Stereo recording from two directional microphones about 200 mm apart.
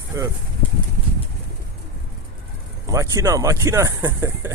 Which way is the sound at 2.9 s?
15° right (ahead or behind).